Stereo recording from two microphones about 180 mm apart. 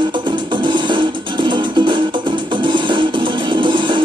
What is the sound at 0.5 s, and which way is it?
Music, 25° right (ahead or behind).